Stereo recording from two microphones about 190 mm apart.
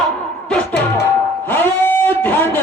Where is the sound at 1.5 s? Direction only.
10° left (ahead or behind).